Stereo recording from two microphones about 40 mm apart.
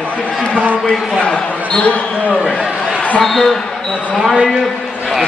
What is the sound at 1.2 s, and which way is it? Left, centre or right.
Speech, left.